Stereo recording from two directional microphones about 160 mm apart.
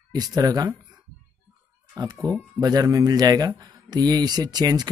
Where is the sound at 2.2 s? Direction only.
25° right (ahead or behind).